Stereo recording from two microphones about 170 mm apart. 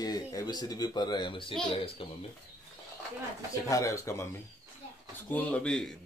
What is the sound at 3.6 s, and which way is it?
Speech, 20° left (ahead or behind).